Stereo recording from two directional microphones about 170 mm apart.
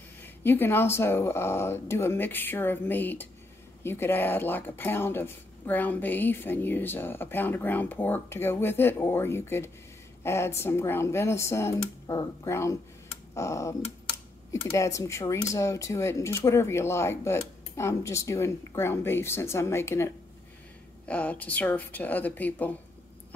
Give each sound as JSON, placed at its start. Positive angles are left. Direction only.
{"t": 0.2, "sound": "speech", "side_deg": 10}